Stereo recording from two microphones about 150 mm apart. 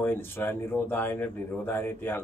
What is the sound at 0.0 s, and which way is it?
Speech, 15° left (ahead or behind).